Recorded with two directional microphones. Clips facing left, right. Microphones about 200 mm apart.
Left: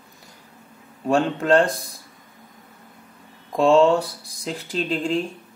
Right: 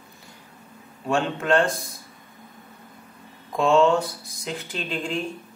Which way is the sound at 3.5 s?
35° left (ahead or behind).